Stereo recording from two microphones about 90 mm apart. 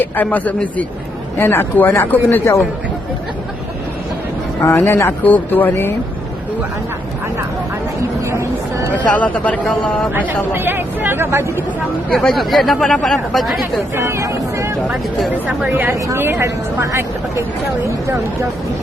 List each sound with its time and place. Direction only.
0.0 s a man's voice: 20° left (ahead or behind)
2.4 s speech: 30° left (ahead or behind)
4.6 s speech: 25° left (ahead or behind)
8.2 s a sound: 30° right (ahead or behind)
9.1 s a man's voice: 15° left (ahead or behind)
10.2 s speech: 20° right (ahead or behind)
12.1 s speech: centre (ahead or behind)
13.9 s speech: 30° right (ahead or behind)
15.4 s speech: 15° right (ahead or behind)
15.9 s speech: 35° right (ahead or behind)